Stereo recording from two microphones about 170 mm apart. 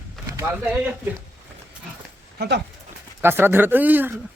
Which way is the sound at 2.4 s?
85° right.